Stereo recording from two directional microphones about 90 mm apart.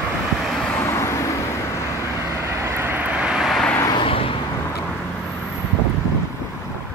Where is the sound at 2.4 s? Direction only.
30° right (ahead or behind); by 3.6 s 5° right (ahead or behind).